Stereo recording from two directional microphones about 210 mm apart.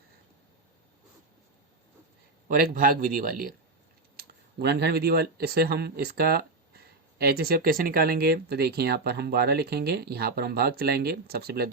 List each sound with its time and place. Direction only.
2.5 s a man's voice: 40° right (ahead or behind)